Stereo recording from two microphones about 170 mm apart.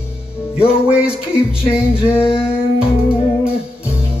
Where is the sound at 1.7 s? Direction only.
5° right (ahead or behind).